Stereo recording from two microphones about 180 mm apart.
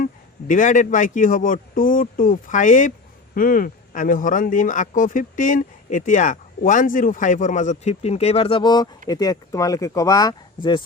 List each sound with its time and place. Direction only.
0.0 s speech: 45° left (ahead or behind); by 10.8 s 25° left (ahead or behind)